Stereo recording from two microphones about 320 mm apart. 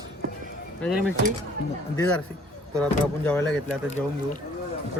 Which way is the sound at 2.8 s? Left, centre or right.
Centre.